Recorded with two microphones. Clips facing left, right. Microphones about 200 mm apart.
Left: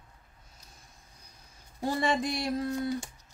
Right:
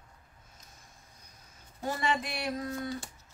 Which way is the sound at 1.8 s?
30° left (ahead or behind).